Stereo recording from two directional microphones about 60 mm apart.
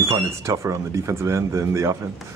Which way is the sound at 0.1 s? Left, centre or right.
Right.